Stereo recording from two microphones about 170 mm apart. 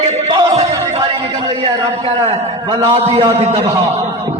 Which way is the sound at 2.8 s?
35° right (ahead or behind).